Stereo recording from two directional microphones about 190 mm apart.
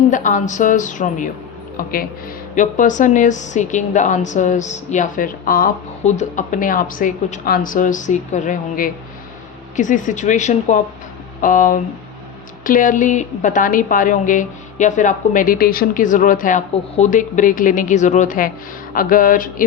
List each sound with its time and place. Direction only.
0.1 s a woman's voice: 40° left (ahead or behind)